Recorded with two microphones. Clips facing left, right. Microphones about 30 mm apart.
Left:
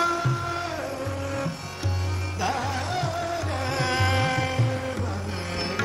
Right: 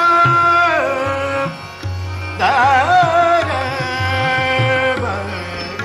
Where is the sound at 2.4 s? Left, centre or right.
Right.